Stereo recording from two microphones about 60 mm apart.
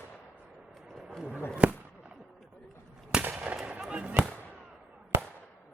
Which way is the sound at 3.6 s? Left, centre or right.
Centre.